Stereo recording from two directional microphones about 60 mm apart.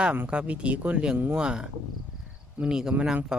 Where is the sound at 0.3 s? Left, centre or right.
Centre.